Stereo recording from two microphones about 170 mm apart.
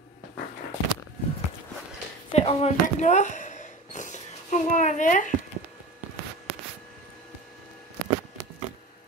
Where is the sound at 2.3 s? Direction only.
40° left (ahead or behind).